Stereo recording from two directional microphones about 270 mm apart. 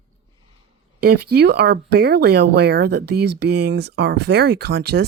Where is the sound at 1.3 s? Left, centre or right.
Right.